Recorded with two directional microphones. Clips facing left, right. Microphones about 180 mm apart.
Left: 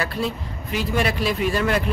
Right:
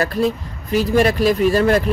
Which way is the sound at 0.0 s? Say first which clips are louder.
Right 7 dB; 45° right (ahead or behind).